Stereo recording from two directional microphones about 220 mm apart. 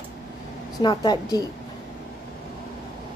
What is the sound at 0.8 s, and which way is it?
Speech, 20° left (ahead or behind).